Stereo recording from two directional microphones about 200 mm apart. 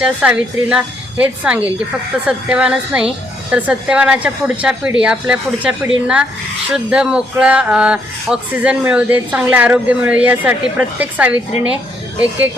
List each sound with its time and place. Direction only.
0.0 s a woman's voice: 5° right (ahead or behind)